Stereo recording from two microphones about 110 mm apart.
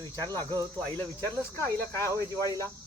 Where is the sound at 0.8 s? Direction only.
15° left (ahead or behind).